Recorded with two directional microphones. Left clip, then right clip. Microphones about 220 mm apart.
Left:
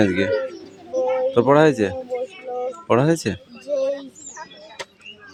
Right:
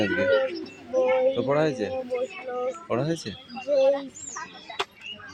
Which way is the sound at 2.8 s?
45° left (ahead or behind).